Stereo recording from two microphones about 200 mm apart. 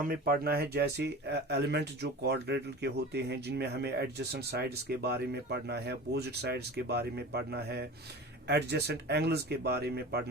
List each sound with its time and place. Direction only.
0.0 s speech: 45° right (ahead or behind)